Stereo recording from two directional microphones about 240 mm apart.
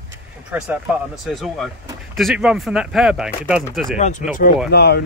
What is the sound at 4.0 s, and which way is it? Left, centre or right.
Speech, left.